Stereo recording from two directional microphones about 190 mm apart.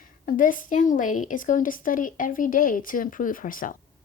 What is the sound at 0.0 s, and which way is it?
A woman's voice, 45° left (ahead or behind).